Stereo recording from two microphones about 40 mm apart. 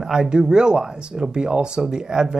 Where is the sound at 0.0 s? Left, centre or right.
Centre.